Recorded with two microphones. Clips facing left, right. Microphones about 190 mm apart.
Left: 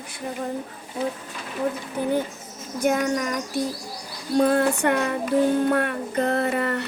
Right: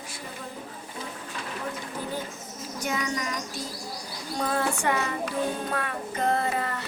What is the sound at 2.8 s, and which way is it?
Child singing, 50° left (ahead or behind).